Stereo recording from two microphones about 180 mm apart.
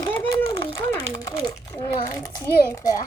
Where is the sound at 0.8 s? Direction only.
15° left (ahead or behind).